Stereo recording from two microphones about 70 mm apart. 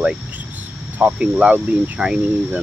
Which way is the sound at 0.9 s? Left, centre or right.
Centre.